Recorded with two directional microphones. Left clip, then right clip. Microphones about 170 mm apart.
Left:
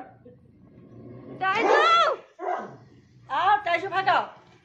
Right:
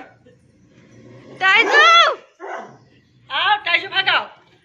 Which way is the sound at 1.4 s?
5° right (ahead or behind).